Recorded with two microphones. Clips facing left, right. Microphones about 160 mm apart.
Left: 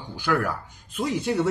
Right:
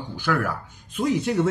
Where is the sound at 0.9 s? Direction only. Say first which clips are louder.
Right 2 dB; 5° left (ahead or behind).